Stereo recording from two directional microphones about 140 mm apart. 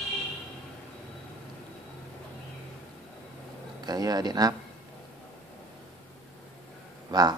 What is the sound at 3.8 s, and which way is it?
Speech, 30° right (ahead or behind).